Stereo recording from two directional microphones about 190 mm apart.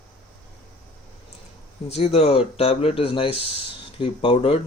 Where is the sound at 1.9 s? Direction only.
35° left (ahead or behind).